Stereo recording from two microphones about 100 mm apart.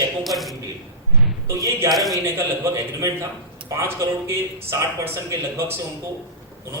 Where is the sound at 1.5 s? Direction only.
30° right (ahead or behind).